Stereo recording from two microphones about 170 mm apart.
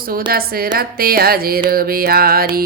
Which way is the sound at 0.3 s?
60° right (ahead or behind).